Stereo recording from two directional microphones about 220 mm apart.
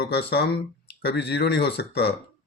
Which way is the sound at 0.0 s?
50° left (ahead or behind).